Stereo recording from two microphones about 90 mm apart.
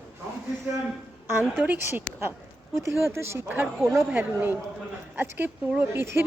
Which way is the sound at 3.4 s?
15° right (ahead or behind).